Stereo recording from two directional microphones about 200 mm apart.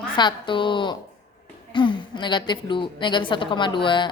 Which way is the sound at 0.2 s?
25° left (ahead or behind).